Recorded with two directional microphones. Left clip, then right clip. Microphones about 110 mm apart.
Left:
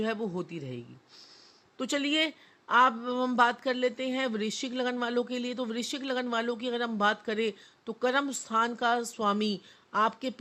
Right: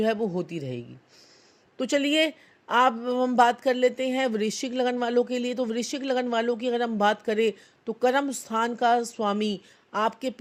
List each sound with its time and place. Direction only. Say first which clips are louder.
0.0 s speech: right 7 dB; 30° right (ahead or behind)